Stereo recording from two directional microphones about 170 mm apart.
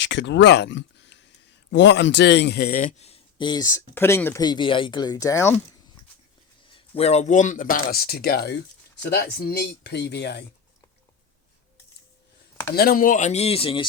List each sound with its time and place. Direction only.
0.0 s a man's voice: 90° left; by 3.1 s 50° left (ahead or behind)
3.1 s speech: 30° left (ahead or behind)
4.4 s speech: 30° left (ahead or behind)
6.7 s a man's voice: 30° left (ahead or behind); by 10.4 s 85° left
12.7 s speech: 60° left (ahead or behind); by 13.8 s 30° left (ahead or behind)